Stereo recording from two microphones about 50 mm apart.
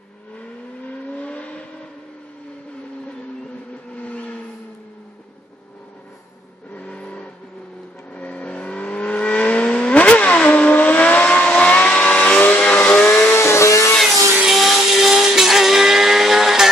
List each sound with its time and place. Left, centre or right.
1.1 s vehicle: left
3.9 s vehicle: left
6.8 s vehicle: centre; by 13.4 s left
13.4 s vehicle: left
14.4 s vehicle: centre